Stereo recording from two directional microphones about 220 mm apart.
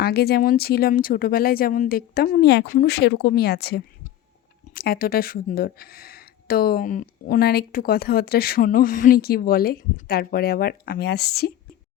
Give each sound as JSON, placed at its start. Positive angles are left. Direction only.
{"t": 0.0, "sound": "speech", "side_deg": 45}